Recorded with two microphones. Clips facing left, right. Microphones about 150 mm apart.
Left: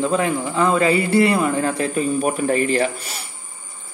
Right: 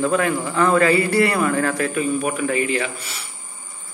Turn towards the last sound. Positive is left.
turn(degrees=40)  # may be behind; listen again after turning